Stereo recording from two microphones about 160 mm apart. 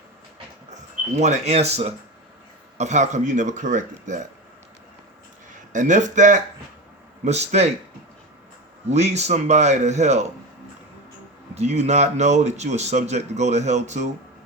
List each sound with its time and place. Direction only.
1.1 s speech: 45° right (ahead or behind)
5.7 s speech: 50° right (ahead or behind)
8.9 s speech: 45° right (ahead or behind)
11.5 s speech: 45° right (ahead or behind)